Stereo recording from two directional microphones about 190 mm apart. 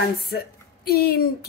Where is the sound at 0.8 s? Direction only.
55° left (ahead or behind).